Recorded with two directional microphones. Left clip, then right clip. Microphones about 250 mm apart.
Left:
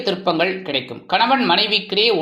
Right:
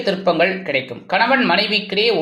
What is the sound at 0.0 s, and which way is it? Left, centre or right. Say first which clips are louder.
Speech: right 2 dB; centre.